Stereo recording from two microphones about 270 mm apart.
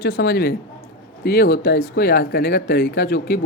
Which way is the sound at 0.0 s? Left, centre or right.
Left.